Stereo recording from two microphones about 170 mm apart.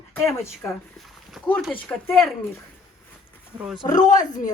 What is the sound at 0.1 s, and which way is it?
Speech, 15° left (ahead or behind).